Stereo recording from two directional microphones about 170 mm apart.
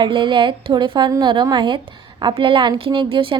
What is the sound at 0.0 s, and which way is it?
A woman's voice, 30° right (ahead or behind).